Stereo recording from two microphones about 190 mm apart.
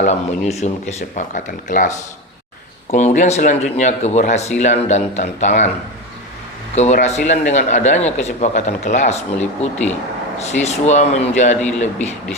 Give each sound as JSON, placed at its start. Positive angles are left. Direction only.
{"t": 0.0, "sound": "a man's voice", "side_deg": 35}
{"t": 2.9, "sound": "a man's voice", "side_deg": 40}
{"t": 6.7, "sound": "a man's voice", "side_deg": 35}